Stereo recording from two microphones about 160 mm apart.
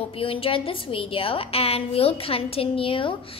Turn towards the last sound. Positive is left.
turn(degrees=35)  # may be behind; listen again after turning